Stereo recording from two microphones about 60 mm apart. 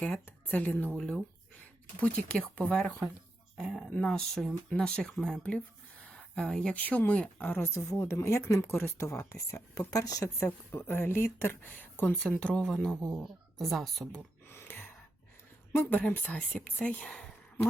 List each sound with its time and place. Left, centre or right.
0.3 s speech: left
0.9 s speech: centre
4.0 s speech: centre
4.7 s speech: centre
6.1 s a sound: centre
6.7 s speech: left
7.6 s speech: left
9.0 s speech: left
10.4 s speech: left
12.4 s speech: centre
13.1 s speech: centre
14.4 s a sound: left
15.7 s speech: left
16.9 s a sound: centre